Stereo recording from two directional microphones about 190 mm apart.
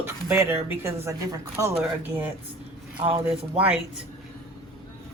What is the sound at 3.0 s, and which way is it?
Speech, 30° right (ahead or behind).